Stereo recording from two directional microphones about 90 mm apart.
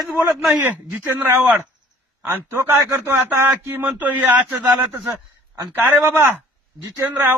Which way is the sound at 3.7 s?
15° right (ahead or behind).